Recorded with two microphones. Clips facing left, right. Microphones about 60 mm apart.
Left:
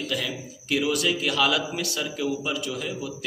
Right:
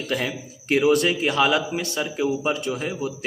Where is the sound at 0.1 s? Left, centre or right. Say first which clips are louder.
Right 4 dB; right.